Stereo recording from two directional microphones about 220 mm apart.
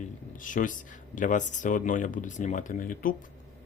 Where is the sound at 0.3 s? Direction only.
35° left (ahead or behind).